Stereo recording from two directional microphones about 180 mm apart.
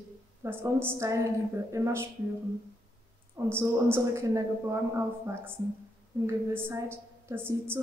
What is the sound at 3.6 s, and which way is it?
A man's voice, 15° right (ahead or behind).